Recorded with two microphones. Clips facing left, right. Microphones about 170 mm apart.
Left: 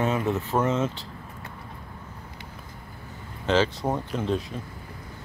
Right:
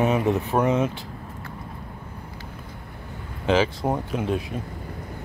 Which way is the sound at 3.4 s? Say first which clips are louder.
Right 2 dB; 10° right (ahead or behind).